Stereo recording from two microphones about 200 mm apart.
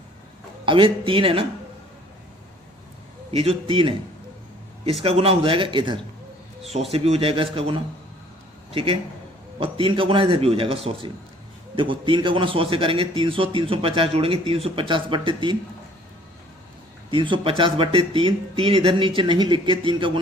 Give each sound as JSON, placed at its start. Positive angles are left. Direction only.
{"t": 0.6, "sound": "a man's voice", "side_deg": -25}
{"t": 3.3, "sound": "a man's voice", "side_deg": -30}
{"t": 5.0, "sound": "a man's voice", "side_deg": -30}
{"t": 17.1, "sound": "a man's voice", "side_deg": -25}